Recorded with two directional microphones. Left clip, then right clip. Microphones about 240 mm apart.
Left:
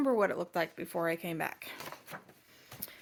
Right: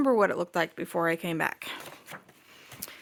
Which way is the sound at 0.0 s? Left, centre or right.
Right.